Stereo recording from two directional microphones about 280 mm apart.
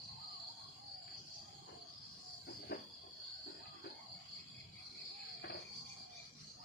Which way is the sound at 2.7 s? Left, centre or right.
Left.